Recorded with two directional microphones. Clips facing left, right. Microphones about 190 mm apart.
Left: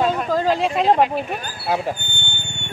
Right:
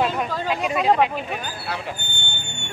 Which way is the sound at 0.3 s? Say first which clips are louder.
Left 5 dB; 40° left (ahead or behind).